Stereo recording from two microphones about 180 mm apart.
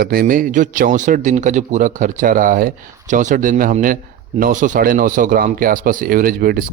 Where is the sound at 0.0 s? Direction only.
55° right (ahead or behind).